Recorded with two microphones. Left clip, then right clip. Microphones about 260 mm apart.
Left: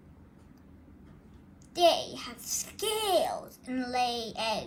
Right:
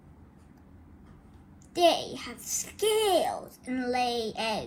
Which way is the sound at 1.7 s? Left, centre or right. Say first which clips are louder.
Right 1 dB; left.